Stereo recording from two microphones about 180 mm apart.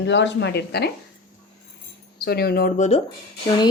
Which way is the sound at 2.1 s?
60° left (ahead or behind).